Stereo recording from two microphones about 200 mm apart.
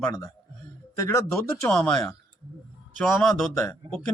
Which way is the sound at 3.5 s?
10° left (ahead or behind).